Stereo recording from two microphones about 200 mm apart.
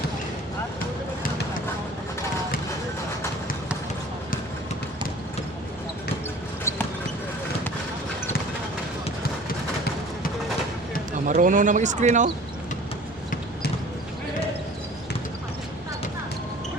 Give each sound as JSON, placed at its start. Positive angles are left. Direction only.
{"t": 11.3, "sound": "speech", "side_deg": -40}